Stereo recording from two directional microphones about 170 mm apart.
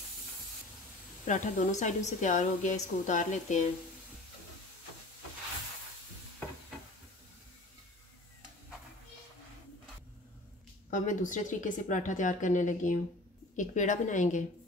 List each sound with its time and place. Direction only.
1.2 s a woman's voice: 45° left (ahead or behind)
10.9 s a woman's voice: 50° left (ahead or behind)